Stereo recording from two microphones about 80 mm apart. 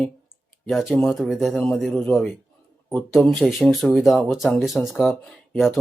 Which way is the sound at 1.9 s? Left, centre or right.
Left.